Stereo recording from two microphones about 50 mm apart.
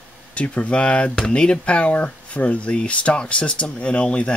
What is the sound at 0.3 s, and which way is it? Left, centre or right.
Speech, left.